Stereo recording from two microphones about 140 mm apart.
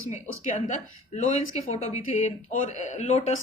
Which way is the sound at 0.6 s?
60° left (ahead or behind).